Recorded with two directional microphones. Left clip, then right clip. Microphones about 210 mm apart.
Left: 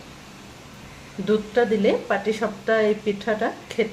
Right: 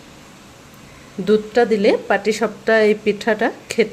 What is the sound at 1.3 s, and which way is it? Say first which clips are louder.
Speech: right 5 dB; 35° right (ahead or behind).